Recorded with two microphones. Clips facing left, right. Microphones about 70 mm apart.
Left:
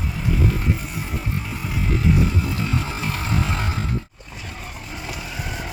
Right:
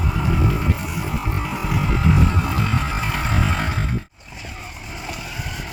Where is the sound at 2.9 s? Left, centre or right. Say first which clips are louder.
Right 2 dB; right.